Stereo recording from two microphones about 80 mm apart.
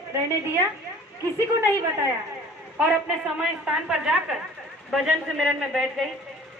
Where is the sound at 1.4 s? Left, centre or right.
Right.